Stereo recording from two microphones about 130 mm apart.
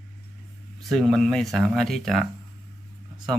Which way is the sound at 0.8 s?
Centre (ahead or behind).